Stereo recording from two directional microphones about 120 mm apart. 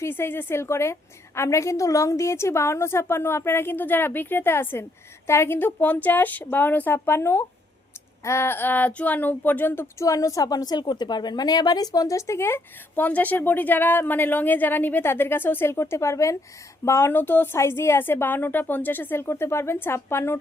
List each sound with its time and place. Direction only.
0.0 s speech: 20° left (ahead or behind)